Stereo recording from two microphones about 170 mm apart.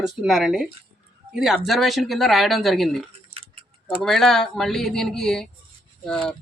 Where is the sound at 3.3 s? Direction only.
30° right (ahead or behind).